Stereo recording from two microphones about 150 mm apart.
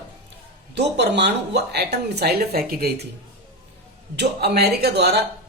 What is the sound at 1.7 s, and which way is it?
A woman's voice, 90° right.